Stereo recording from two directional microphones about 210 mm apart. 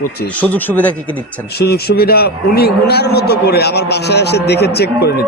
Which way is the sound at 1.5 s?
50° left (ahead or behind).